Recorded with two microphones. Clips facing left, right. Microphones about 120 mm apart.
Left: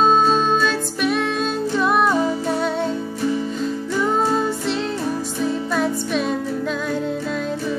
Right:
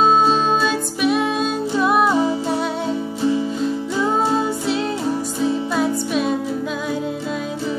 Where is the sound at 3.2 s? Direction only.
20° right (ahead or behind).